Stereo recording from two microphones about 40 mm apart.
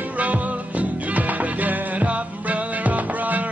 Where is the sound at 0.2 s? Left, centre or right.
Right.